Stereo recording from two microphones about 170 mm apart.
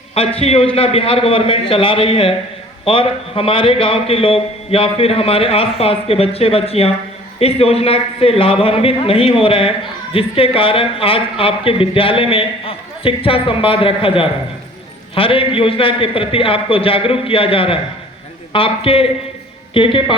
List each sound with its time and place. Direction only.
0.1 s a man's voice: 35° left (ahead or behind)